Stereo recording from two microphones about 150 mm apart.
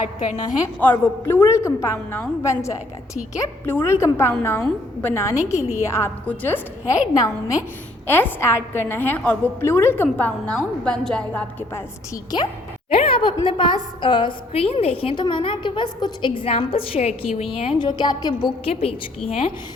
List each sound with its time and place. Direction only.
0.8 s a woman's voice: 15° left (ahead or behind)
12.1 s a woman's voice: 25° left (ahead or behind)
12.9 s a woman's voice: 40° left (ahead or behind)
17.6 s a woman's voice: 35° left (ahead or behind)